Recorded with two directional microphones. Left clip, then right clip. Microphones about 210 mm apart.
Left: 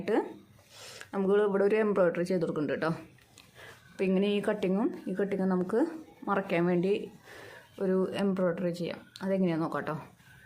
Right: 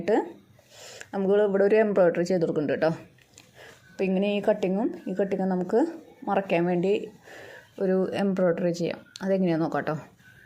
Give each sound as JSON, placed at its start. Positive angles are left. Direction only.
{"t": 0.0, "sound": "speech", "side_deg": -10}
{"t": 3.9, "sound": "speech", "side_deg": -5}